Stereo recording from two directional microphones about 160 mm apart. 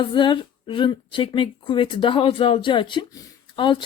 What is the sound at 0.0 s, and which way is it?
A woman's voice, 30° left (ahead or behind).